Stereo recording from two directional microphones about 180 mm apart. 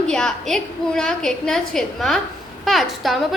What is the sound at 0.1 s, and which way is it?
A woman's voice, 5° left (ahead or behind).